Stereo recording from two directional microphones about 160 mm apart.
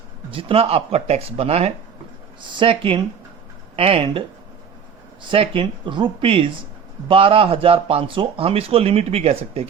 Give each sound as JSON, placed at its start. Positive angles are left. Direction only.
{"t": 0.3, "sound": "speech", "side_deg": -35}
{"t": 5.3, "sound": "speech", "side_deg": -35}